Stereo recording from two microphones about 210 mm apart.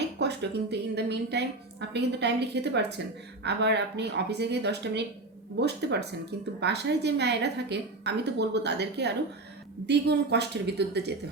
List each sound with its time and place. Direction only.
0.2 s a woman's voice: 55° right (ahead or behind)